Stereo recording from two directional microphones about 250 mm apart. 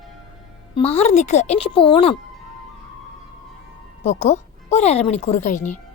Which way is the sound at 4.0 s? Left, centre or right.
Left.